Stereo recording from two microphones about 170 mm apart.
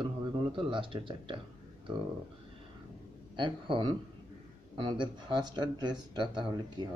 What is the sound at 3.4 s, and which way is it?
Speech, 30° right (ahead or behind).